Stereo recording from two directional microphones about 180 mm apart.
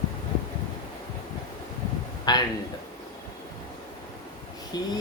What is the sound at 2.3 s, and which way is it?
Speech, 20° left (ahead or behind).